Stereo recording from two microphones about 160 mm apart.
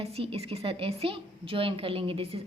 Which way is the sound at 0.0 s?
35° right (ahead or behind).